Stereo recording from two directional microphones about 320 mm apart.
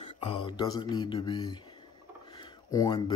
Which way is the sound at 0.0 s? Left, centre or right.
Centre.